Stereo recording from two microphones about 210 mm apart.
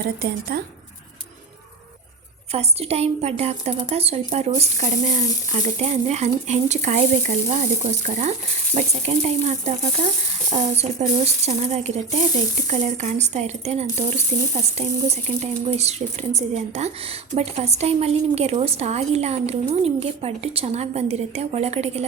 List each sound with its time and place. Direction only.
0.0 s speech: 45° right (ahead or behind)
2.5 s speech: 30° right (ahead or behind)